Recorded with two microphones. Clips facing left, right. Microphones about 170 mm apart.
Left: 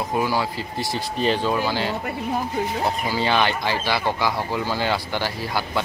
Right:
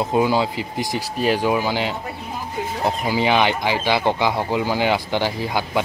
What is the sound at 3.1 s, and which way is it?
Speech, 15° right (ahead or behind).